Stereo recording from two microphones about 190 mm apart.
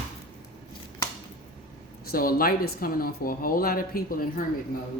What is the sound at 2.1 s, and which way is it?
Speech, 50° left (ahead or behind).